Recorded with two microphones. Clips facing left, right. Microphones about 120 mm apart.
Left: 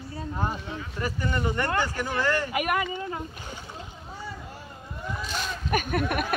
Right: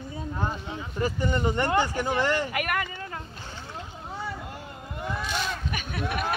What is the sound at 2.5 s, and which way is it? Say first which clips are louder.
Speech: left 3 dB; 10° left (ahead or behind).